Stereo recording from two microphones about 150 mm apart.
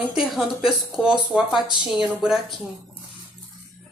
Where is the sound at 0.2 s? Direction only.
5° right (ahead or behind).